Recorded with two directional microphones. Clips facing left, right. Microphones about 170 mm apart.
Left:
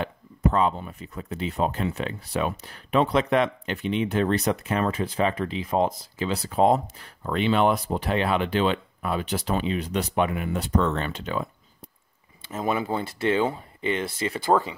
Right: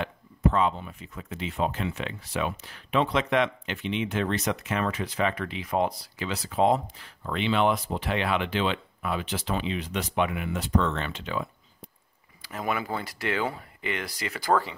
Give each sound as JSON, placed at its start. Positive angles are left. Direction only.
{"t": 0.0, "sound": "speech", "side_deg": 40}
{"t": 5.9, "sound": "speech", "side_deg": 40}
{"t": 12.4, "sound": "speech", "side_deg": 25}